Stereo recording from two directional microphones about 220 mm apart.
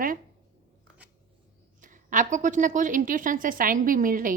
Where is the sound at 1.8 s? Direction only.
35° right (ahead or behind).